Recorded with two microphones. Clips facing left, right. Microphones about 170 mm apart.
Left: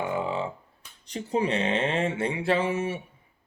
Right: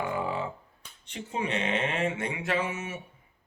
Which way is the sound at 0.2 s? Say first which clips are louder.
Left 2 dB; 25° left (ahead or behind).